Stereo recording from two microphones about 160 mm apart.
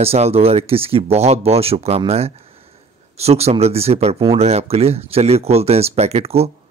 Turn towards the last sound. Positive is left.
turn(degrees=-40)  # may be behind; listen again after turning